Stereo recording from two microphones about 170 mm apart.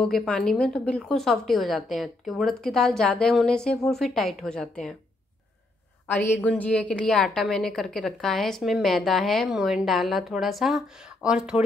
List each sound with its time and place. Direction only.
0.0 s a woman's voice: 5° left (ahead or behind)
6.0 s a woman's voice: 10° left (ahead or behind); by 11.6 s 5° right (ahead or behind)